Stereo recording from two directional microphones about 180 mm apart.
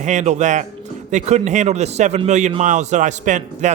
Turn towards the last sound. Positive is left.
turn(degrees=-45)  # may be behind; listen again after turning